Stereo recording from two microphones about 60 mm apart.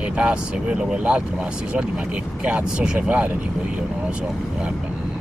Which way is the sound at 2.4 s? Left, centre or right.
Centre.